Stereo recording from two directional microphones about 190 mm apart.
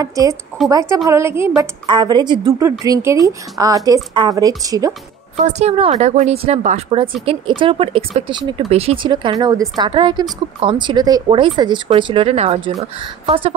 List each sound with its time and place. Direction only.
0.0 s a woman's voice: 15° right (ahead or behind)
5.4 s speech: 35° right (ahead or behind)